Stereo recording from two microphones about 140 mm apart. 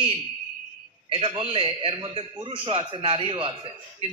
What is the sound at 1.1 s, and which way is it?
A man's voice, 40° right (ahead or behind).